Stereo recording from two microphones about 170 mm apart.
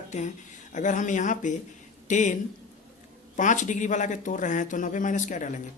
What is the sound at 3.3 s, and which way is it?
Speech, 50° left (ahead or behind).